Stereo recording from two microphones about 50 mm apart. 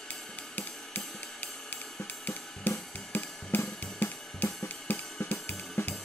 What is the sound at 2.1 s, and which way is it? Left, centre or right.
Drum kit, left.